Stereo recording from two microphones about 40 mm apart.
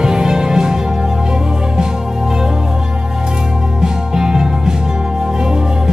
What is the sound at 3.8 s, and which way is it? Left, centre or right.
Music, centre.